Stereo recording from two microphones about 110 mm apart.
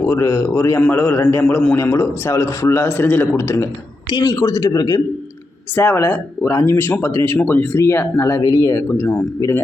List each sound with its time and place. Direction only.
0.0 s speech: 25° left (ahead or behind)
4.1 s speech: 40° left (ahead or behind)
5.7 s speech: 20° left (ahead or behind)